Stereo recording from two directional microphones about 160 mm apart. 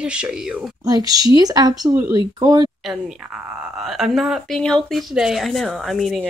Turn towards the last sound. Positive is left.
turn(degrees=0)  # may be behind; listen again after turning